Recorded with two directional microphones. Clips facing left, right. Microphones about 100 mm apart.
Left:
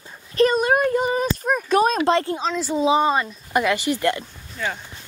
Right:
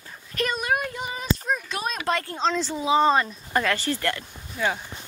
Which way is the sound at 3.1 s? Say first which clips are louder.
Even; 5° left (ahead or behind).